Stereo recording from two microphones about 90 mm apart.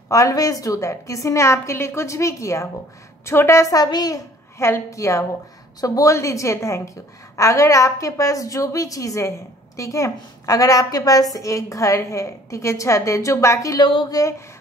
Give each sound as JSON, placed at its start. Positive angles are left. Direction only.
{"t": 0.1, "sound": "a woman's voice", "side_deg": 40}
{"t": 3.8, "sound": "a child's voice", "side_deg": 45}
{"t": 4.6, "sound": "a woman's voice", "side_deg": 30}
{"t": 13.7, "sound": "speech", "side_deg": 60}